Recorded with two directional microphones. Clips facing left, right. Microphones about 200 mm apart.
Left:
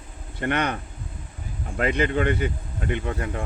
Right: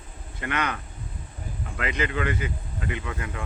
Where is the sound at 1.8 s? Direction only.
50° left (ahead or behind).